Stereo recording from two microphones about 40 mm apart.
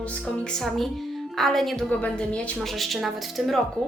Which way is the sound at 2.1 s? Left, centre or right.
Left.